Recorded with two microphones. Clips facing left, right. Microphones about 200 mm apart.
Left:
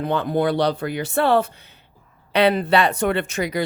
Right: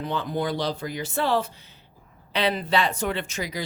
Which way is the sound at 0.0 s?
60° left (ahead or behind).